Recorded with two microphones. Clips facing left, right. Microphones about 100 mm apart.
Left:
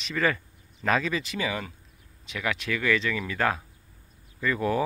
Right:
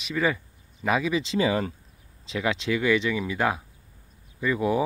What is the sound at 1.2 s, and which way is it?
Speech, 30° right (ahead or behind).